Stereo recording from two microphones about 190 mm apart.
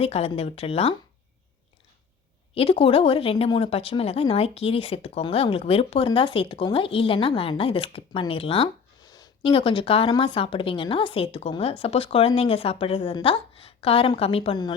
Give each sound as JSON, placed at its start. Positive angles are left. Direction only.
{"t": 0.0, "sound": "speech", "side_deg": 30}
{"t": 2.6, "sound": "speech", "side_deg": 30}